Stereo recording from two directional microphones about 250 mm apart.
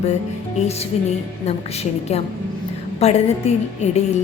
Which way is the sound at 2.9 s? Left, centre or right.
Left.